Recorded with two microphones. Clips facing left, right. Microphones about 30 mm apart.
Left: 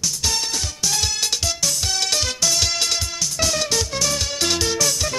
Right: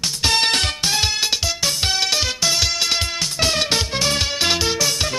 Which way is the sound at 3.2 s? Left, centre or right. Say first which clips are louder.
Right 2 dB; right.